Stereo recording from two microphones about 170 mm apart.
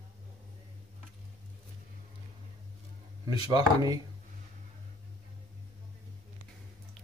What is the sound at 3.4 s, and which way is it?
Speech, 25° right (ahead or behind).